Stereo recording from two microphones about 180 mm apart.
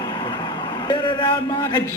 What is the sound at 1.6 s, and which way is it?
Speech, 15° left (ahead or behind).